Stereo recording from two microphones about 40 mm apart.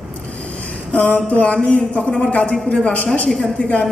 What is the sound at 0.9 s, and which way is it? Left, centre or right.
A man's voice, left.